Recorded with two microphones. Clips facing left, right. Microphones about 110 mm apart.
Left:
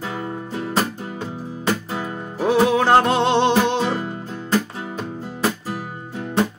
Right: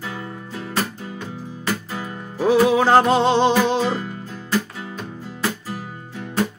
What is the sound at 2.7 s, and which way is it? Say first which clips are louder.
Music: right 1 dB; centre (ahead or behind).